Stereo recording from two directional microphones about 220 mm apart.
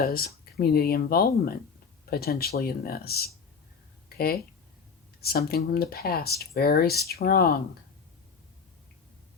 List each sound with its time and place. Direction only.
0.0 s speech: 45° left (ahead or behind)
5.2 s speech: 45° left (ahead or behind)